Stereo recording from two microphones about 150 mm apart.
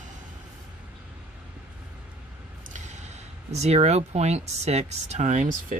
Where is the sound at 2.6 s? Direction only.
55° right (ahead or behind).